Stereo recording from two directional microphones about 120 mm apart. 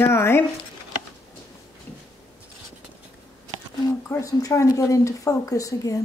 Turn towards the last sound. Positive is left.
turn(degrees=30)  # may be behind; listen again after turning